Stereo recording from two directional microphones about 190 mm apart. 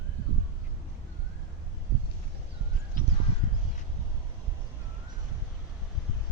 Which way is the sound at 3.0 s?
45° left (ahead or behind).